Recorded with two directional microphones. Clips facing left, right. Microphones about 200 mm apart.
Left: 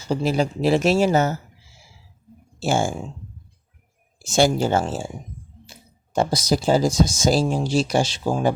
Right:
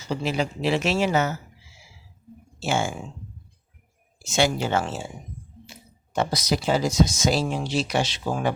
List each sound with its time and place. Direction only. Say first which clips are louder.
0.1 s speech: left 5 dB; 40° left (ahead or behind)
2.6 s speech: left 4 dB; 40° left (ahead or behind)
4.3 s speech: left 4 dB; 40° left (ahead or behind)
6.5 s speech: left 5 dB; 40° left (ahead or behind)
7.9 s speech: left 4 dB; 30° left (ahead or behind)